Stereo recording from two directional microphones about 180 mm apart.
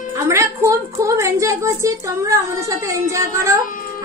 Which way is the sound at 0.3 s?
15° right (ahead or behind).